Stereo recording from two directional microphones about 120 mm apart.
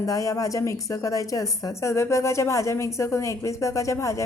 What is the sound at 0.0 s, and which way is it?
A woman's voice, 30° left (ahead or behind).